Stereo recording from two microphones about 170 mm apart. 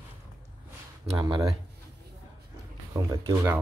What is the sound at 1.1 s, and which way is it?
Speech, 25° right (ahead or behind).